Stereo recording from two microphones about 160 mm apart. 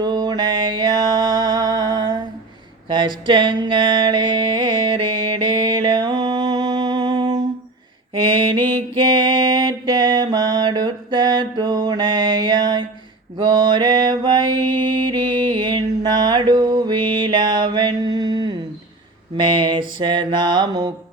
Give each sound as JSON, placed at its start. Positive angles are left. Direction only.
{"t": 0.0, "sound": "music", "side_deg": -25}
{"t": 2.9, "sound": "a sound", "side_deg": -30}
{"t": 8.1, "sound": "mantra", "side_deg": -30}